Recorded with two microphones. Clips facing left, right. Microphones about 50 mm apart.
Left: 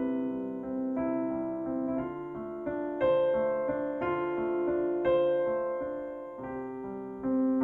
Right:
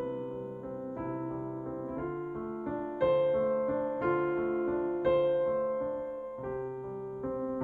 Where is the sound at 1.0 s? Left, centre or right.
Left.